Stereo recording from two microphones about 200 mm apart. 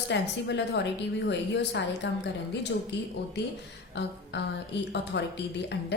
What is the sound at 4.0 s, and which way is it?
Speech, 60° left (ahead or behind).